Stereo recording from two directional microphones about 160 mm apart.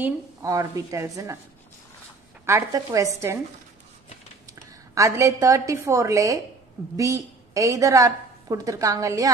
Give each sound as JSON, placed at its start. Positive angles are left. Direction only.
{"t": 0.0, "sound": "a woman's voice", "side_deg": -20}
{"t": 2.4, "sound": "a woman's voice", "side_deg": -20}
{"t": 4.9, "sound": "a woman's voice", "side_deg": -20}